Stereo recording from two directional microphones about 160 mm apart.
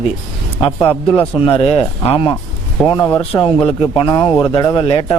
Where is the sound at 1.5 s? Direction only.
35° left (ahead or behind).